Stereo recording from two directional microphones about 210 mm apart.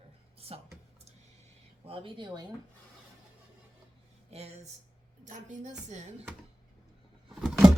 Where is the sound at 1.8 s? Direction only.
25° right (ahead or behind).